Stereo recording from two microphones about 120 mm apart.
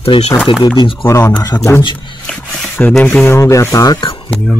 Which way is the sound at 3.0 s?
15° left (ahead or behind).